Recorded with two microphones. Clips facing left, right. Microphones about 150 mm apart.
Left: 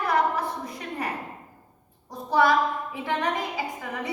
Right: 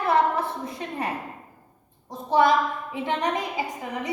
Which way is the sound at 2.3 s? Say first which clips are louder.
Right 1 dB; 20° right (ahead or behind).